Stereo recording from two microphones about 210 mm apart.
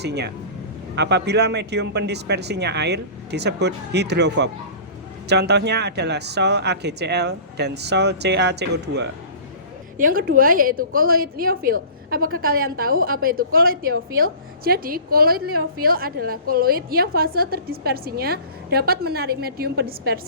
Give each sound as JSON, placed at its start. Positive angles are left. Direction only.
{"t": 0.0, "sound": "a woman's voice", "side_deg": -50}
{"t": 10.0, "sound": "a woman's voice", "side_deg": -40}